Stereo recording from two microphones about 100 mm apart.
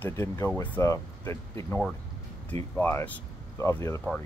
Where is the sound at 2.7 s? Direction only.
20° left (ahead or behind).